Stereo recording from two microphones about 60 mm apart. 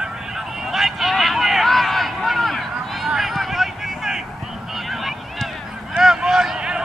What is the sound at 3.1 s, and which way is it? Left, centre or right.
Vehicle, centre.